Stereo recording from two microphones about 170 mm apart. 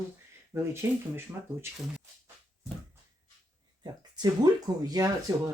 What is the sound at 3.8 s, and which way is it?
Speech, 25° right (ahead or behind).